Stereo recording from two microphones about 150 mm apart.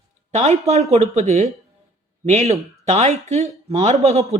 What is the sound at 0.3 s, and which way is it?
Speech, 50° right (ahead or behind).